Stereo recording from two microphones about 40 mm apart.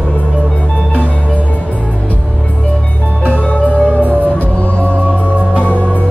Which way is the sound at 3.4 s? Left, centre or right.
Left.